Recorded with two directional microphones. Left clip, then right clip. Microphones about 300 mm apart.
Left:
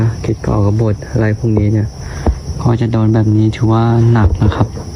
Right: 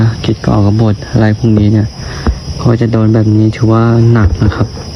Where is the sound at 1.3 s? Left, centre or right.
Right.